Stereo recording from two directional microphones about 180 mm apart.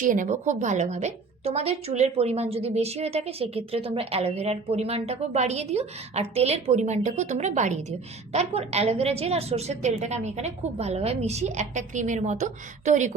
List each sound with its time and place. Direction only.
0.0 s a woman's voice: 45° right (ahead or behind)